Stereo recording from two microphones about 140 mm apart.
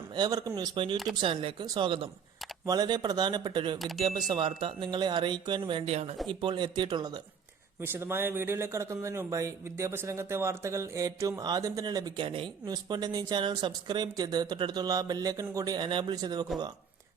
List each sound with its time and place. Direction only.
0.1 s speech: 30° right (ahead or behind); by 6.1 s 45° right (ahead or behind)
6.2 s speech: 35° right (ahead or behind)
7.8 s speech: 15° right (ahead or behind)